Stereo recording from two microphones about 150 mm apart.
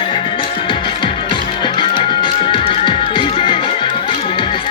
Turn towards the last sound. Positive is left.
turn(degrees=35)  # may be behind; listen again after turning